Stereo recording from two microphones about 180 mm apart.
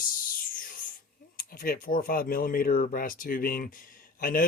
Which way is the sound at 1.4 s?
50° left (ahead or behind).